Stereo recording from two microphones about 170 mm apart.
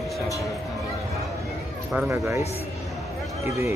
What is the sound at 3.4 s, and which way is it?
Speech, 15° right (ahead or behind).